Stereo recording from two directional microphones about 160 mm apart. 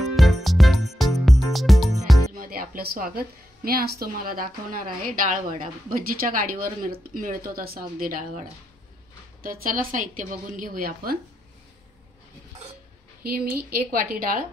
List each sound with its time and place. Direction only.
0.0 s music: centre (ahead or behind)
2.3 s a sound: 65° right (ahead or behind)
4.0 s a woman's voice: 65° right (ahead or behind)
13.2 s speech: 70° right (ahead or behind)